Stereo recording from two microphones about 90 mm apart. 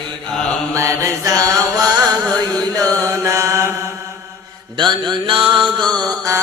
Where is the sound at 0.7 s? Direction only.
35° right (ahead or behind).